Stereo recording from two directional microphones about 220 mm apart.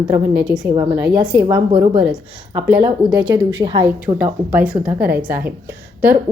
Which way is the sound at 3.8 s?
5° right (ahead or behind).